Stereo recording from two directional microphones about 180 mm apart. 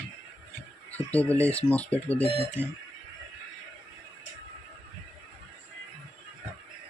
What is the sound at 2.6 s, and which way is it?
Speech, 10° right (ahead or behind).